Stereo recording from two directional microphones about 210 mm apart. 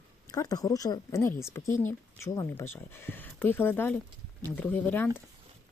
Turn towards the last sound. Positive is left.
turn(degrees=10)  # may be behind; listen again after turning